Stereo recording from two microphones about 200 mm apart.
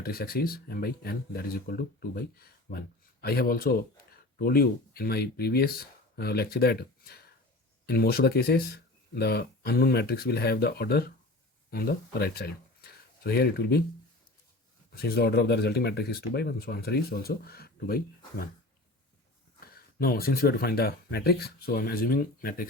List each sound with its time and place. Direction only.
0.0 s speech: 50° left (ahead or behind)
14.9 s speech: 50° left (ahead or behind)
19.5 s speech: 50° left (ahead or behind)